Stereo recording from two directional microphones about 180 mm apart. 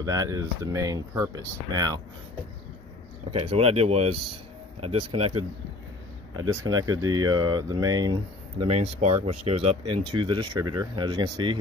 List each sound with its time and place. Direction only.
0.0 s speech: 20° right (ahead or behind)
3.3 s speech: 35° right (ahead or behind)
6.3 s speech: 20° right (ahead or behind)
8.6 s speech: 40° right (ahead or behind); by 11.5 s 25° right (ahead or behind)